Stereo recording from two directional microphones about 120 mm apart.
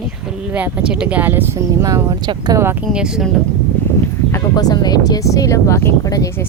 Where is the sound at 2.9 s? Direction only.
5° right (ahead or behind).